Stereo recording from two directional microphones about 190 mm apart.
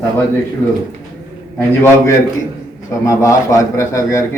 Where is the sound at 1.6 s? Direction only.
15° left (ahead or behind).